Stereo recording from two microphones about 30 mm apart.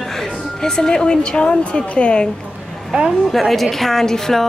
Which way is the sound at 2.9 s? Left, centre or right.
Right.